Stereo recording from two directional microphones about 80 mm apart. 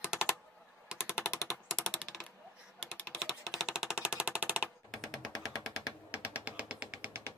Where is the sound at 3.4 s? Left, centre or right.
Centre.